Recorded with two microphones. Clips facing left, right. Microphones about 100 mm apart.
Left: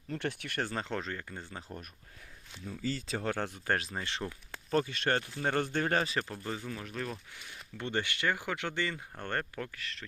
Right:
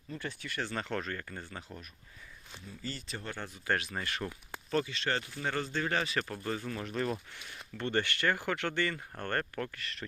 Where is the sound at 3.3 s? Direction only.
90° left.